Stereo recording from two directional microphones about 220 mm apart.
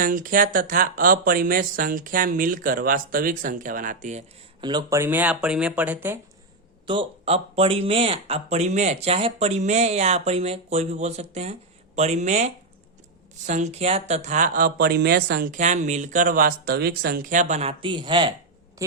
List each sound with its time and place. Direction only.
0.0 s speech: 40° right (ahead or behind)
4.6 s speech: 15° right (ahead or behind)
6.8 s speech: 25° right (ahead or behind)